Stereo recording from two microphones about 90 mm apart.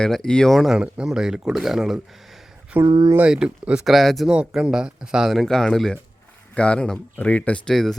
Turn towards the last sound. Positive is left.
turn(degrees=15)  # may be behind; listen again after turning